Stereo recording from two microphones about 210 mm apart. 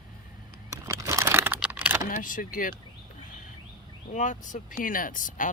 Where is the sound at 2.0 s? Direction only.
40° left (ahead or behind).